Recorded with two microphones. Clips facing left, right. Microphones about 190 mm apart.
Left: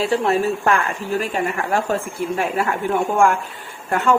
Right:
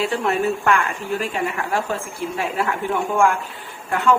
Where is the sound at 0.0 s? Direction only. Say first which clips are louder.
Left 2 dB; 35° left (ahead or behind).